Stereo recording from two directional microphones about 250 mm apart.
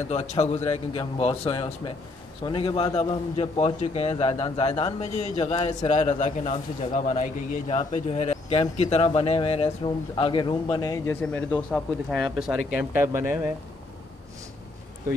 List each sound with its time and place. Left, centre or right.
0.1 s speech: left; by 13.5 s centre